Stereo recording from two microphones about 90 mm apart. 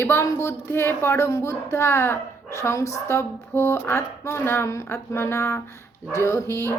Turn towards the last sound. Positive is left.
turn(degrees=30)  # may be behind; listen again after turning